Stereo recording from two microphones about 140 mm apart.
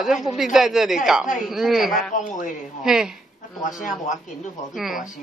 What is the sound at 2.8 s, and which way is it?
Speech, 5° right (ahead or behind).